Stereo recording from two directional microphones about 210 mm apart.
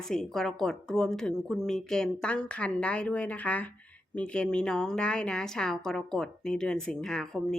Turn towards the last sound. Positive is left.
turn(degrees=5)  # may be behind; listen again after turning